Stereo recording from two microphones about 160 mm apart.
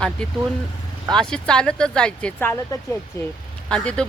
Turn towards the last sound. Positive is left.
turn(degrees=5)  # may be behind; listen again after turning